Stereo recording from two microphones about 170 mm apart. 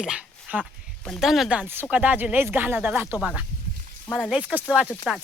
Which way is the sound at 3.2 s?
Centre (ahead or behind).